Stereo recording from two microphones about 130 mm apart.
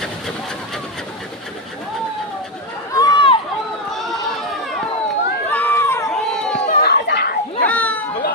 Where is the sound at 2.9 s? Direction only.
35° left (ahead or behind).